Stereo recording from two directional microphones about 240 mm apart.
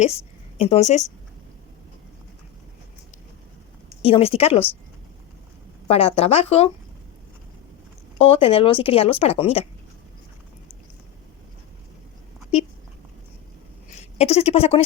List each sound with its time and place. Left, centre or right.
0.6 s a woman's voice: left
4.0 s a woman's voice: left
5.9 s a woman's voice: left
8.2 s a woman's voice: left
13.9 s speech: left